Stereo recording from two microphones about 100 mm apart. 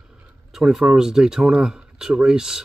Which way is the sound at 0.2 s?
5° right (ahead or behind).